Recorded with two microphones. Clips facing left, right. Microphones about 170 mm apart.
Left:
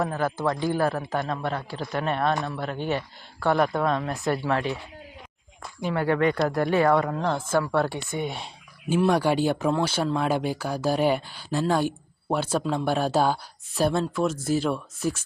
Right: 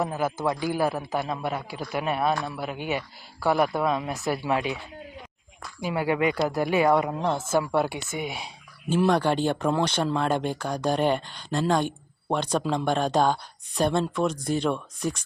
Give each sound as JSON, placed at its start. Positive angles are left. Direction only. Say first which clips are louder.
{"t": 0.0, "sound": "speech", "louder": "left 1 dB", "side_deg": -5}
{"t": 5.8, "sound": "speech", "louder": "left 1 dB", "side_deg": -10}
{"t": 9.0, "sound": "speech", "louder": "left 1 dB", "side_deg": 10}